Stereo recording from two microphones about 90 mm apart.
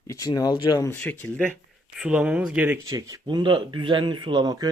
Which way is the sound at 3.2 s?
60° right (ahead or behind).